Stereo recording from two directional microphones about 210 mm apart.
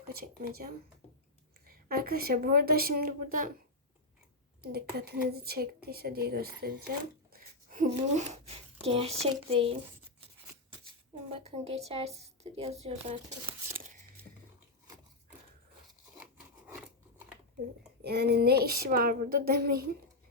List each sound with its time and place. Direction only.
0.1 s a woman's voice: 45° right (ahead or behind)
4.6 s a woman's voice: 50° right (ahead or behind)
8.1 s speech: 35° right (ahead or behind)
11.3 s speech: 30° right (ahead or behind)
16.6 s scissors: 5° right (ahead or behind)
18.0 s a woman's voice: 50° right (ahead or behind)